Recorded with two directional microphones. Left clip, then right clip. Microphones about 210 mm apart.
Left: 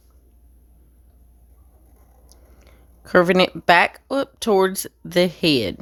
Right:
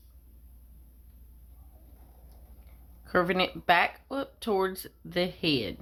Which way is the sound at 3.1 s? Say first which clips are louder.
Left 11 dB; 50° left (ahead or behind).